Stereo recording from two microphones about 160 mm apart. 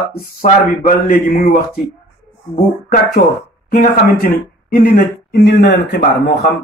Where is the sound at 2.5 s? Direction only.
65° left (ahead or behind).